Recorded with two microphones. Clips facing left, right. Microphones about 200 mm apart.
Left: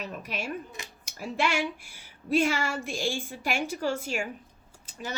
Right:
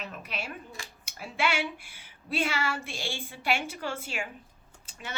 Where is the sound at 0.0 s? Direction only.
40° left (ahead or behind).